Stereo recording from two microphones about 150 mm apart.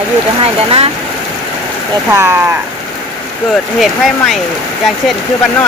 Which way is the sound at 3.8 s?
Centre (ahead or behind).